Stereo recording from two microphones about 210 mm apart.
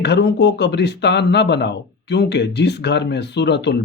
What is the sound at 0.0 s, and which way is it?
Speech, 55° left (ahead or behind).